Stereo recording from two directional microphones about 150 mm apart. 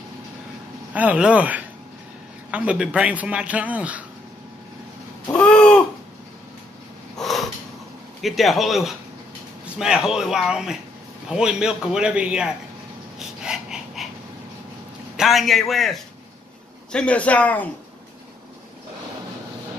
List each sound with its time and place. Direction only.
0.9 s a man's voice: 10° right (ahead or behind)
5.3 s babbling: 5° left (ahead or behind)
7.2 s snort: centre (ahead or behind)
8.2 s a man's voice: centre (ahead or behind)
13.4 s breathing: 5° right (ahead or behind)
15.1 s a man's voice: centre (ahead or behind)